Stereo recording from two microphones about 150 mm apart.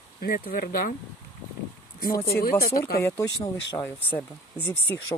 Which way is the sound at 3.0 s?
20° left (ahead or behind).